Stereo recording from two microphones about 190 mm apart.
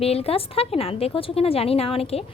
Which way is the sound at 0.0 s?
30° left (ahead or behind).